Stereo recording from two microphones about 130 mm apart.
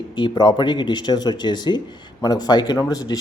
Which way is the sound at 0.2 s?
35° left (ahead or behind).